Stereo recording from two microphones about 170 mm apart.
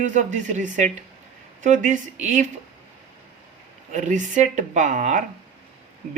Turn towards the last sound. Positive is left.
turn(degrees=-45)  # may be behind; listen again after turning